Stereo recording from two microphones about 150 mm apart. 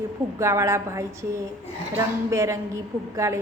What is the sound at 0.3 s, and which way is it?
A woman's voice, 20° right (ahead or behind).